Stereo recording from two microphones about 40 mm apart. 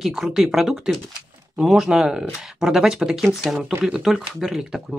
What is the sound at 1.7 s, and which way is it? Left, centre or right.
Speech, centre.